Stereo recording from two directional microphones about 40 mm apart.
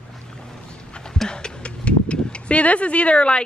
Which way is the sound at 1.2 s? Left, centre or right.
Left.